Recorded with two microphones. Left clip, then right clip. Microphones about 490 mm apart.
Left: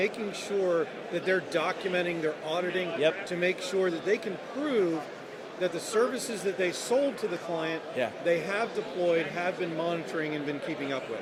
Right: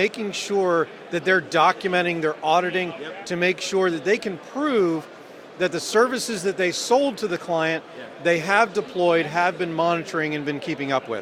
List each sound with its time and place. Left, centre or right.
0.0 s a man's voice: right
8.2 s a man's voice: right